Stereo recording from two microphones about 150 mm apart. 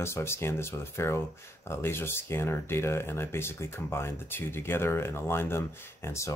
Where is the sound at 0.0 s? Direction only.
15° left (ahead or behind).